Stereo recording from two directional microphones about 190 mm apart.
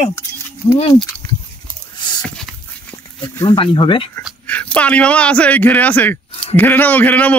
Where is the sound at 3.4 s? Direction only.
20° left (ahead or behind).